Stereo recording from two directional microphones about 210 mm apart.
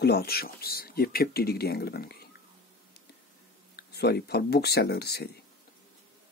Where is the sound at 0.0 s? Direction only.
50° left (ahead or behind).